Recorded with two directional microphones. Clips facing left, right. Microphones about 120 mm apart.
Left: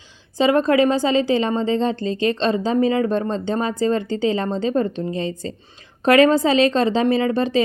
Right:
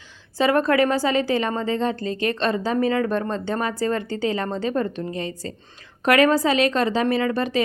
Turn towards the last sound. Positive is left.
turn(degrees=25)  # may be behind; listen again after turning